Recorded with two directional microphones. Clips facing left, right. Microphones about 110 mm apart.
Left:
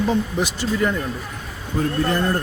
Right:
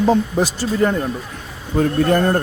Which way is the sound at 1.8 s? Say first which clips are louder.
Right 5 dB; 60° right (ahead or behind).